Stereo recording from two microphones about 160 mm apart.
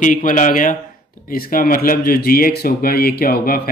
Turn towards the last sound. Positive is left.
turn(degrees=70)  # may be behind; listen again after turning